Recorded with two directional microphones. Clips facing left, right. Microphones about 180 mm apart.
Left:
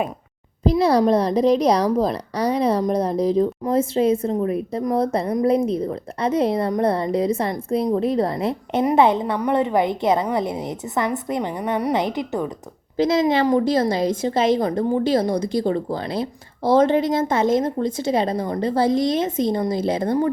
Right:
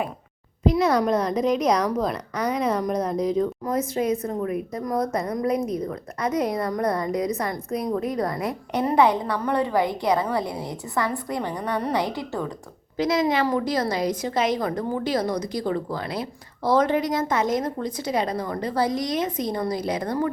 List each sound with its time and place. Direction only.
0.6 s a woman's voice: 30° left (ahead or behind)